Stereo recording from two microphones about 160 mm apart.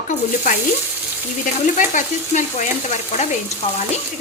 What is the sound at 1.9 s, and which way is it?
Speech, 55° left (ahead or behind).